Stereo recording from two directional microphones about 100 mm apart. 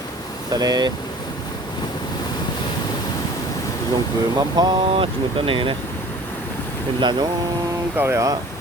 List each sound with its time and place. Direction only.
0.5 s speech: 40° right (ahead or behind)
4.4 s speech: 40° right (ahead or behind); by 5.7 s 60° right (ahead or behind)
7.0 s speech: 45° right (ahead or behind)
7.9 s speech: 25° right (ahead or behind)